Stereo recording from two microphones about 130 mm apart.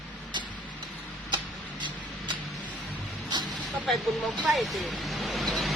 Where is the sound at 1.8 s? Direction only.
35° right (ahead or behind).